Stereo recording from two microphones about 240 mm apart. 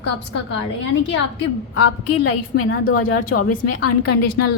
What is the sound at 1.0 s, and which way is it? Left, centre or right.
Speech, left.